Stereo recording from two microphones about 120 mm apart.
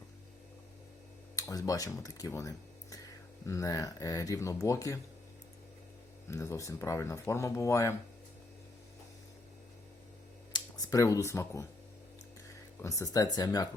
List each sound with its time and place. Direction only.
1.4 s speech: 30° left (ahead or behind)
6.2 s speech: 25° left (ahead or behind)
10.5 s speech: 30° left (ahead or behind)
12.8 s speech: 30° left (ahead or behind)